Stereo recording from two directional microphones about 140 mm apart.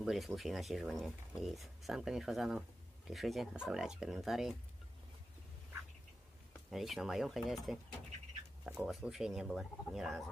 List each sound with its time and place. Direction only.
0.0 s speech: centre (ahead or behind)
6.7 s speech: centre (ahead or behind)